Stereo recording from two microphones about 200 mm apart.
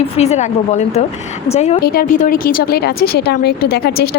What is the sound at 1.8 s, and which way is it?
A woman's voice, 50° left (ahead or behind).